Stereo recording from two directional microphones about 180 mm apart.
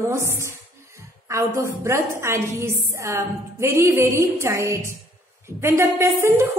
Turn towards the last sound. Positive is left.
turn(degrees=-15)  # may be behind; listen again after turning